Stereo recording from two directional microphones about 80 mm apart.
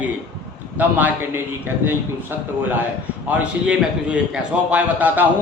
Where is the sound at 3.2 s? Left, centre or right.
Centre.